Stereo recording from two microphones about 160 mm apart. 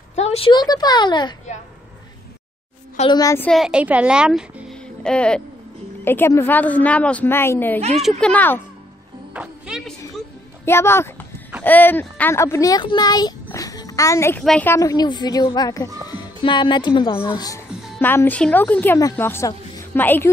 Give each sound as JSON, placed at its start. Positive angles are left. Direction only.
{"t": 0.1, "sound": "a sound", "side_deg": 40}
{"t": 0.5, "sound": "a child's voice", "side_deg": 25}
{"t": 3.1, "sound": "a child's voice", "side_deg": 25}
{"t": 3.3, "sound": "a woman's voice", "side_deg": 5}
{"t": 9.3, "sound": "music", "side_deg": -5}
{"t": 10.6, "sound": "a child's voice", "side_deg": 15}
{"t": 14.4, "sound": "a woman's voice", "side_deg": 5}
{"t": 14.7, "sound": "a child's voice", "side_deg": 20}
{"t": 17.6, "sound": "music", "side_deg": 0}
{"t": 18.0, "sound": "a woman's voice", "side_deg": 15}